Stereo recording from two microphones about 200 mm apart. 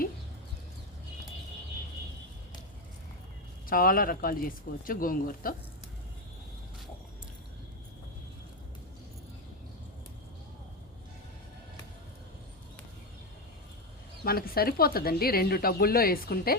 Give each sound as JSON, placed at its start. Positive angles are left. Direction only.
{"t": 3.7, "sound": "a woman's voice", "side_deg": 45}
{"t": 14.3, "sound": "a woman's voice", "side_deg": 50}